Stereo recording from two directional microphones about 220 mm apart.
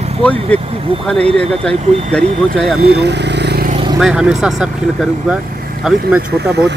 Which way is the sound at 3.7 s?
25° right (ahead or behind).